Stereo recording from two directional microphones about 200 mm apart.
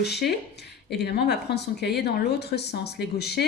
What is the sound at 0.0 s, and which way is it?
A woman's voice, 55° left (ahead or behind).